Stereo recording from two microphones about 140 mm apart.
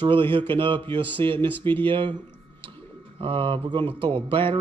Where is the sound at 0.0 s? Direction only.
40° right (ahead or behind).